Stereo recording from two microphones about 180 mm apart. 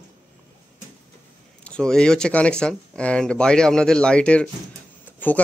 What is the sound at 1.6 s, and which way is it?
Speech, 5° left (ahead or behind).